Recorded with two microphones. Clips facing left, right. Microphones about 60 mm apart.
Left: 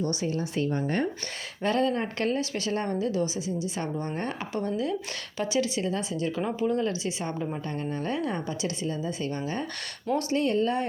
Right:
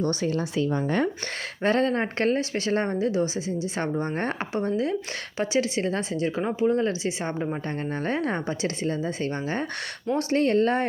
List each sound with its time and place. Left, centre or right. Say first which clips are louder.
0.0 s speech: right 3 dB; right
1.6 s a woman's voice: right 3 dB; right
4.5 s a woman's voice: right 3 dB; right